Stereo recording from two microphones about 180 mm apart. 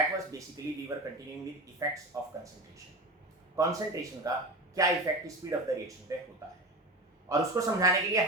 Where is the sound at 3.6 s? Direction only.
20° right (ahead or behind).